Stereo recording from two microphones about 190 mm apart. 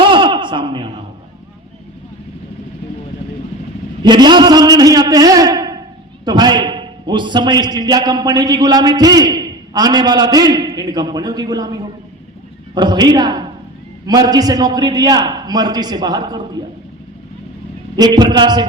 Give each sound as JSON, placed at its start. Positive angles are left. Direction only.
{"t": 0.0, "sound": "a sound", "side_deg": -25}
{"t": 4.0, "sound": "a man's voice", "side_deg": -20}
{"t": 17.9, "sound": "a man's voice", "side_deg": -20}